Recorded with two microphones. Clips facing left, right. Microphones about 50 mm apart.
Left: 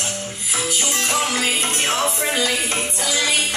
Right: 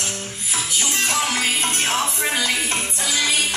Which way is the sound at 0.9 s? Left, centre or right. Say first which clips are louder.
Even; right.